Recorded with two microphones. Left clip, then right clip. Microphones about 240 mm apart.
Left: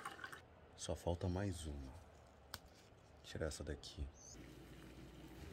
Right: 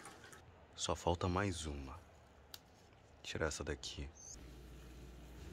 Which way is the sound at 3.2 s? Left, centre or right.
Centre.